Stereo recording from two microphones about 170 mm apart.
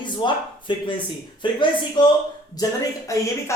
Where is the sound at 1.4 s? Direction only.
25° left (ahead or behind).